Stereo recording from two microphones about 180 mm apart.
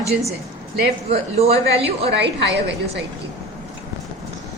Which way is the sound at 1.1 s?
35° right (ahead or behind).